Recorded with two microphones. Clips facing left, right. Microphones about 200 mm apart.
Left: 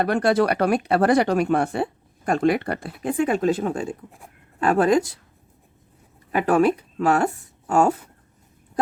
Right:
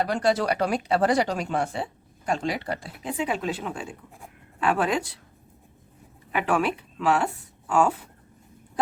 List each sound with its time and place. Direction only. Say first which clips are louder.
0.0 s speech: left 4 dB; 60° left (ahead or behind)
6.3 s speech: left 6 dB; 40° left (ahead or behind)